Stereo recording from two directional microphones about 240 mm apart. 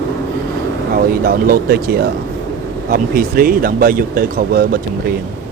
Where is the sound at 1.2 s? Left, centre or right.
Right.